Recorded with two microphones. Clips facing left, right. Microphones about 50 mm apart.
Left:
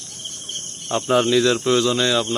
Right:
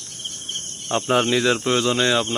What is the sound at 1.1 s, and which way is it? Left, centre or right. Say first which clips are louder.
Speech: left 2 dB; right.